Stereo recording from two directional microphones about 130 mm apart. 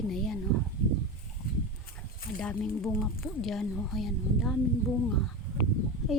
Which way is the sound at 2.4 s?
5° left (ahead or behind).